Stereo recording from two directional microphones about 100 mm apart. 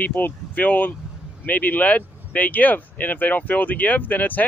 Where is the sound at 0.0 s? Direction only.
20° left (ahead or behind).